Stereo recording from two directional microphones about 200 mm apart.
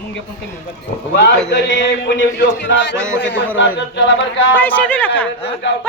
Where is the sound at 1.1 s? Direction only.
60° left (ahead or behind).